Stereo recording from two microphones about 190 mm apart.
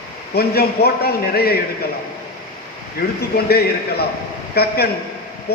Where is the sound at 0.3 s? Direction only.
55° left (ahead or behind).